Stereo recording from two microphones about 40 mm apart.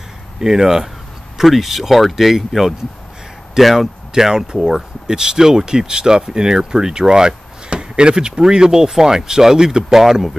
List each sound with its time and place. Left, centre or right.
0.4 s speech: centre